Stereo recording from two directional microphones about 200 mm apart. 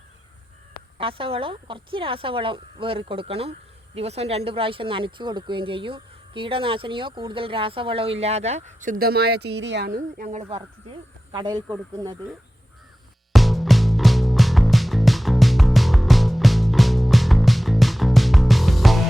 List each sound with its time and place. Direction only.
0.9 s speech: 25° right (ahead or behind); by 10.2 s 50° right (ahead or behind)
10.2 s speech: 30° right (ahead or behind)
13.3 s music: centre (ahead or behind)